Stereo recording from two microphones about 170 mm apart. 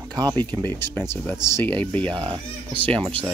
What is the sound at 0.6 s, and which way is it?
Speech, 10° left (ahead or behind).